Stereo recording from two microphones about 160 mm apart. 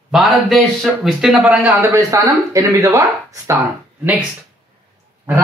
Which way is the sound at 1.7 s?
15° right (ahead or behind).